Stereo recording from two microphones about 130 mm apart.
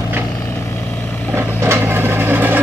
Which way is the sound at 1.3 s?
20° right (ahead or behind).